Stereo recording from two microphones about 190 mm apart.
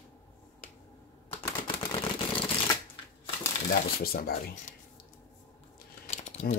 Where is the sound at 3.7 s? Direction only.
50° left (ahead or behind).